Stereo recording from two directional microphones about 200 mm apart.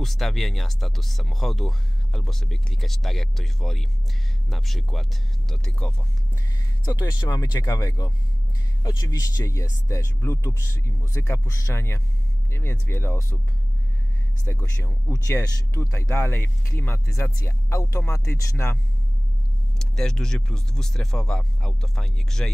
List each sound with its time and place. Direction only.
0.0 s speech: centre (ahead or behind)
6.8 s speech: 20° left (ahead or behind)
14.5 s speech: 10° left (ahead or behind)
19.8 s speech: 5° left (ahead or behind)